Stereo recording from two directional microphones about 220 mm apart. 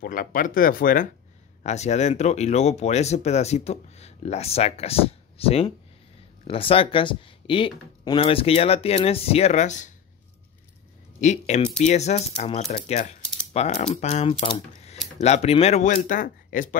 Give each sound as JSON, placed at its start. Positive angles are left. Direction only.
{"t": 0.0, "sound": "speech", "side_deg": 40}
{"t": 11.1, "sound": "speech", "side_deg": 30}